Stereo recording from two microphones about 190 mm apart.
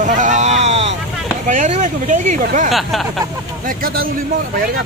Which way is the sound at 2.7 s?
Centre (ahead or behind).